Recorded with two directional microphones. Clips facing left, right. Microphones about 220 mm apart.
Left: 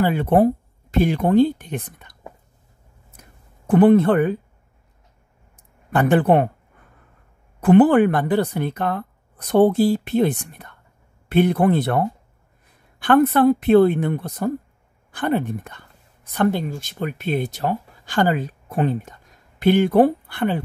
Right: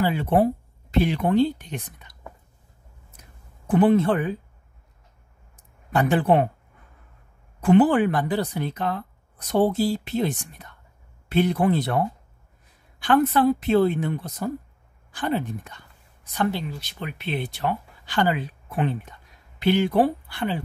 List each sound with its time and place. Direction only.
0.0 s speech: 55° left (ahead or behind)
3.2 s a sound: 55° left (ahead or behind)
5.9 s speech: 55° left (ahead or behind)
7.6 s speech: 55° left (ahead or behind)